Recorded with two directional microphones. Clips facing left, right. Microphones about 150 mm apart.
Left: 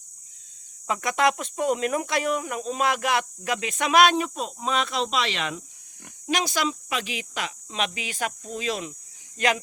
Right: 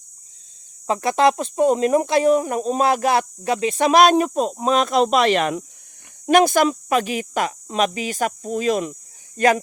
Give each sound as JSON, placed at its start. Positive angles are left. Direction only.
{"t": 0.9, "sound": "speech", "side_deg": -30}